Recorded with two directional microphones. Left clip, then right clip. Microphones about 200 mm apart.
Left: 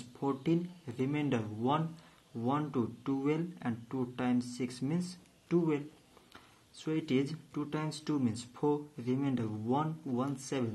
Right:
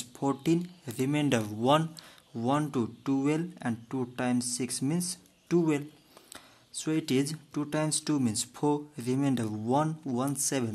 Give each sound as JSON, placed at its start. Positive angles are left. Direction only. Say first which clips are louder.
{"t": 0.2, "sound": "speech", "louder": "right 4 dB", "side_deg": -35}